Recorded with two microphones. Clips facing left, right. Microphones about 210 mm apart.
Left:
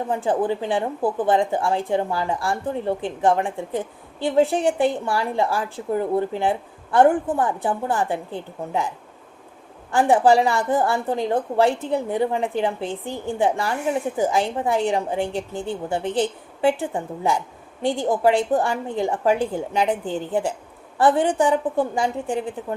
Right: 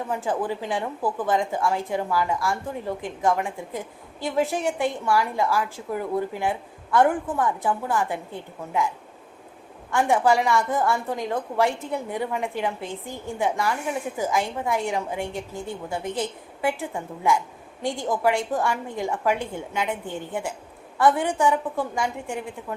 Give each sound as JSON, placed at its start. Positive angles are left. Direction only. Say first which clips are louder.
{"t": 0.1, "sound": "speech", "louder": "left 5 dB", "side_deg": 30}
{"t": 9.9, "sound": "speech", "louder": "left 4 dB", "side_deg": 30}